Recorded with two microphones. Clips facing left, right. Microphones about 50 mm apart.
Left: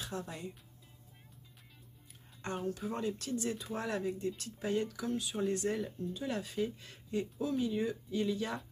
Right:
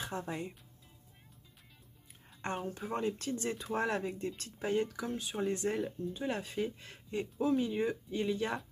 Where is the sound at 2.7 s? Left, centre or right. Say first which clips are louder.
Left 1 dB; right.